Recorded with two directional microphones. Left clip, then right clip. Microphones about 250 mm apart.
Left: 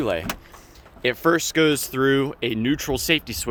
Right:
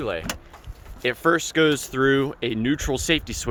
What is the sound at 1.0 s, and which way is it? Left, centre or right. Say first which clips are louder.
Speech: left 1 dB; centre.